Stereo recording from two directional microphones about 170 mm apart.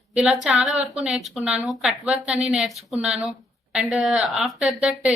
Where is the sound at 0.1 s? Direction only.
5° right (ahead or behind).